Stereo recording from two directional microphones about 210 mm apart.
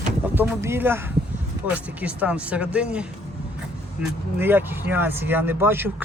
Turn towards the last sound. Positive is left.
turn(degrees=-10)  # may be behind; listen again after turning